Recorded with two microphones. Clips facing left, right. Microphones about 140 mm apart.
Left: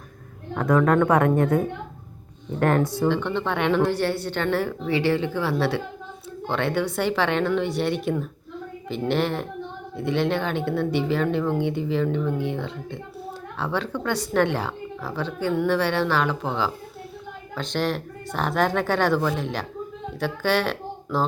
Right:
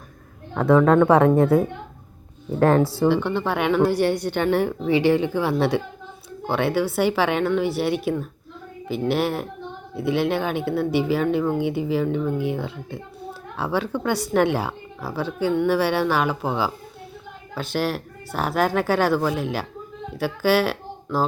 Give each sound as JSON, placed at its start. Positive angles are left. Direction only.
{"t": 1.0, "sound": "speech", "side_deg": -30}
{"t": 2.6, "sound": "speech", "side_deg": -30}
{"t": 3.1, "sound": "speech", "side_deg": -10}